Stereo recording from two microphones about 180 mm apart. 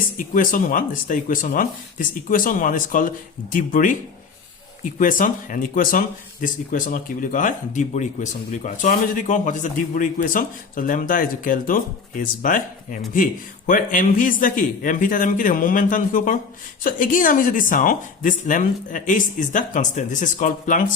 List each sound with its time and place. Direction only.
0.3 s speech: 50° left (ahead or behind)
4.9 s speech: 50° left (ahead or behind)